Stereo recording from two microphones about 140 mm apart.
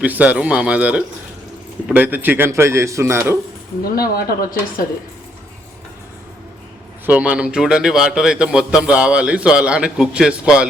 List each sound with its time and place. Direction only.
0.0 s a man's voice: 10° right (ahead or behind)
3.9 s speech: 90° left
7.0 s a man's voice: 10° right (ahead or behind)